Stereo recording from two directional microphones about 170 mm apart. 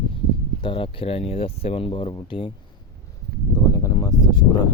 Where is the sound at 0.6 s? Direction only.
30° left (ahead or behind).